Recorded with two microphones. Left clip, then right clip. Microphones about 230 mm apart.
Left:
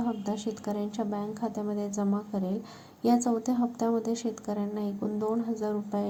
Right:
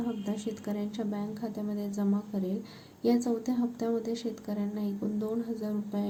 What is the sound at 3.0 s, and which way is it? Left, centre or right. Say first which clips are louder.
Speech: left 2 dB; centre.